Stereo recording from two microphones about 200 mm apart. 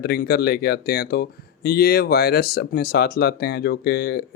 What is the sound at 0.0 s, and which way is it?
Speech, 50° left (ahead or behind).